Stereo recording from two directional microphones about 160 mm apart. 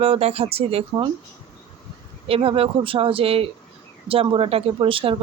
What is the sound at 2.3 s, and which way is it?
A woman's voice, 35° right (ahead or behind).